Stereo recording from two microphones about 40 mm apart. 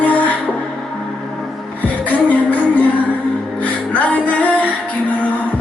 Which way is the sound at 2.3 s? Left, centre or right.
Left.